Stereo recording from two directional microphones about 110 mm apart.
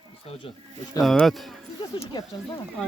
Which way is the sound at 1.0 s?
Centre (ahead or behind).